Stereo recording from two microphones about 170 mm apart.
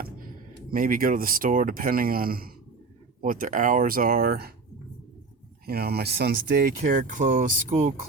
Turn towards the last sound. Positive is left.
turn(degrees=-50)  # may be behind; listen again after turning